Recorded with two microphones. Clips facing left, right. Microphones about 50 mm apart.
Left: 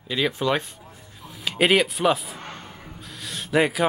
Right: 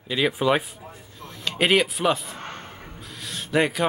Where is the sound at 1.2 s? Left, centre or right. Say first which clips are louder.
Left 2 dB; centre.